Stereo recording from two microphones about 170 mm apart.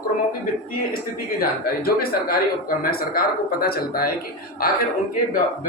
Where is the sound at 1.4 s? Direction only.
60° left (ahead or behind).